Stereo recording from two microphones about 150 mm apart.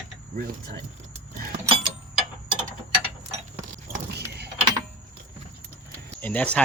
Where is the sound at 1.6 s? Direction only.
35° right (ahead or behind).